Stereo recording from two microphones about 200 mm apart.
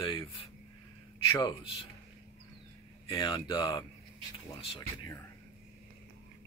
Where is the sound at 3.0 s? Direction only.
25° left (ahead or behind).